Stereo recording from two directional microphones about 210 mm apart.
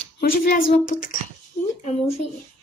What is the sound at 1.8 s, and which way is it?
Speech, 30° left (ahead or behind).